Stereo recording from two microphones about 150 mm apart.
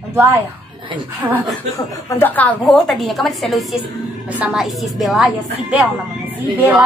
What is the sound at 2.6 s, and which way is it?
A woman's voice, centre (ahead or behind).